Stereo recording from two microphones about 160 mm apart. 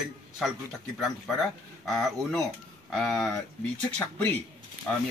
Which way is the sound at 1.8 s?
Centre (ahead or behind).